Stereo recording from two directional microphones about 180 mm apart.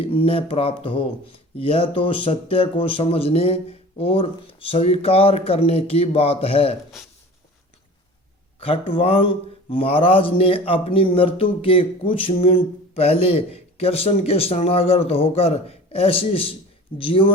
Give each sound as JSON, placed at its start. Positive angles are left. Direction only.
{"t": 0.0, "sound": "speech", "side_deg": 30}
{"t": 8.6, "sound": "speech", "side_deg": 30}